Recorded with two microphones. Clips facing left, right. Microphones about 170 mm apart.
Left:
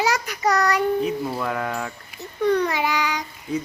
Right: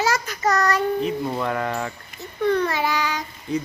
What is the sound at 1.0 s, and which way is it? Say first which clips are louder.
Speech: right 1 dB; centre (ahead or behind).